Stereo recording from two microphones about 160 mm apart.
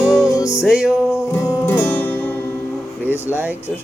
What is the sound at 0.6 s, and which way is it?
Music, 5° right (ahead or behind).